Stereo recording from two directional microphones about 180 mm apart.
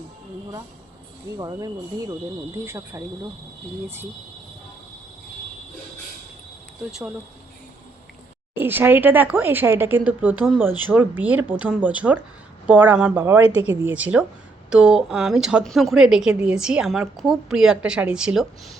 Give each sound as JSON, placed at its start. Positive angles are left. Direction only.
{"t": 1.4, "sound": "speech", "side_deg": -20}
{"t": 8.5, "sound": "a woman's voice", "side_deg": -10}